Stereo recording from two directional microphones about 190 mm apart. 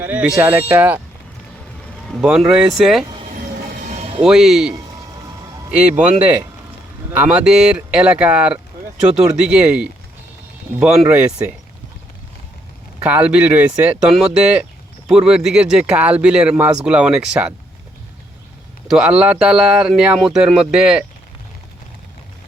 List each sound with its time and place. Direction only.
0.0 s speech: 10° right (ahead or behind)
2.2 s speech: 5° right (ahead or behind)
3.7 s music: 45° right (ahead or behind)
4.3 s speech: 5° right (ahead or behind)
5.9 s speech: 10° right (ahead or behind)
13.0 s speech: 5° right (ahead or behind)
18.9 s speech: 5° right (ahead or behind)